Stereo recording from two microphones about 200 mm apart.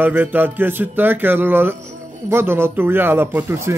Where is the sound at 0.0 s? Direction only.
10° right (ahead or behind).